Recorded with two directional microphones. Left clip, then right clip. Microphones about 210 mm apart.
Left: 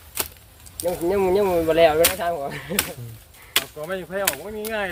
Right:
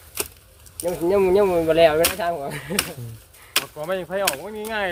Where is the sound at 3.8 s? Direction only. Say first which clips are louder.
Right 2 dB; 45° right (ahead or behind).